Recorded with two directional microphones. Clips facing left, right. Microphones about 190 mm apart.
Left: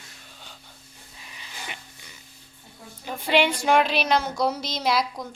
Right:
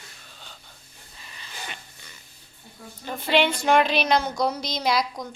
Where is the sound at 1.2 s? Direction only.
10° left (ahead or behind).